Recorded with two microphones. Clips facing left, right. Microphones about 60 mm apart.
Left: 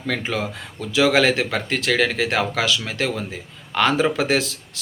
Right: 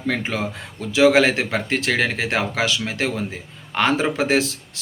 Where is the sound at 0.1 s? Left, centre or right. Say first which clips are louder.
Even; right.